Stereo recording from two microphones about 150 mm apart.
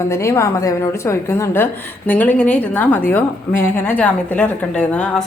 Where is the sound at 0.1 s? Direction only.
20° left (ahead or behind).